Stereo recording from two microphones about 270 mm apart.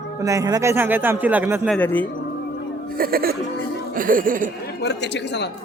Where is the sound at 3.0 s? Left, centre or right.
Right.